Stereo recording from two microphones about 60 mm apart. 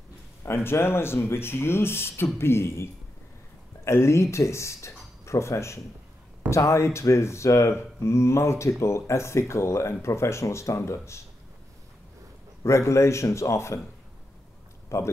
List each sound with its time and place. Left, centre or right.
0.7 s speech: left
12.6 s speech: left
14.9 s speech: left